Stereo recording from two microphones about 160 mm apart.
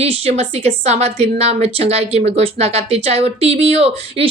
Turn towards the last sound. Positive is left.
turn(degrees=-40)  # may be behind; listen again after turning